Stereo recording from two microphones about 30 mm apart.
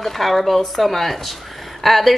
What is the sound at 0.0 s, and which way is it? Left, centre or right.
A woman's voice, centre.